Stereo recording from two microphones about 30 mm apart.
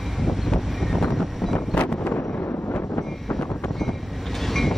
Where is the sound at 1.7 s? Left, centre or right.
Left.